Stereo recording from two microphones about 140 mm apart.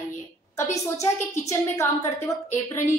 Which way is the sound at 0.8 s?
20° left (ahead or behind).